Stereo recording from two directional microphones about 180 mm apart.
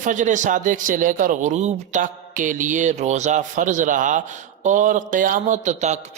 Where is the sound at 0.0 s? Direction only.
45° right (ahead or behind).